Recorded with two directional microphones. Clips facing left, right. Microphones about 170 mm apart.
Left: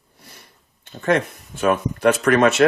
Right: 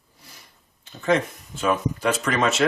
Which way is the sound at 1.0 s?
60° left (ahead or behind).